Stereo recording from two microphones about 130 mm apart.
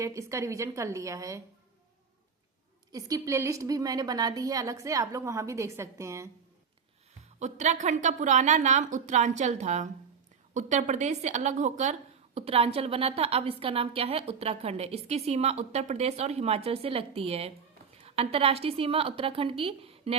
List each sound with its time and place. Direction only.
0.0 s a woman's voice: 25° right (ahead or behind)
2.9 s a woman's voice: 25° right (ahead or behind)
7.3 s a woman's voice: 65° right (ahead or behind); by 20.1 s 50° right (ahead or behind)